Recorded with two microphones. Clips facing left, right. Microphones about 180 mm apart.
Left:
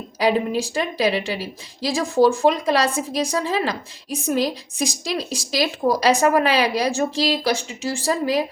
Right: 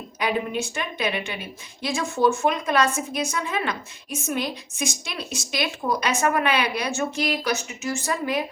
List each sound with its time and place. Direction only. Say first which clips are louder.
0.2 s a woman's voice: left 6 dB; 35° left (ahead or behind)